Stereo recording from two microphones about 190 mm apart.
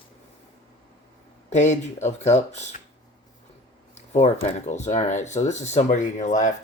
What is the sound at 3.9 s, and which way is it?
Speech, 35° left (ahead or behind).